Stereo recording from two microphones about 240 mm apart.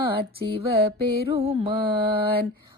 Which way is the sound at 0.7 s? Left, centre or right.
Right.